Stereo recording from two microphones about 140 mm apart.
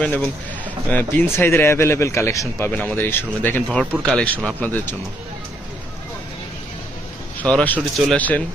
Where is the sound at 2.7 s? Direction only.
10° left (ahead or behind).